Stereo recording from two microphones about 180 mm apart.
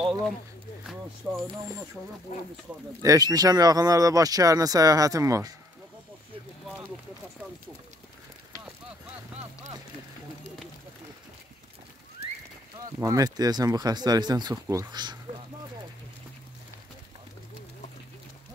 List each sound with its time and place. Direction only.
0.8 s speech: centre (ahead or behind)
3.0 s speech: 20° right (ahead or behind)
13.0 s speech: 20° right (ahead or behind)